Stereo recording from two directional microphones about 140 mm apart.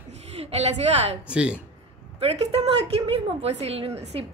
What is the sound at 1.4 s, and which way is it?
Speech, 5° right (ahead or behind).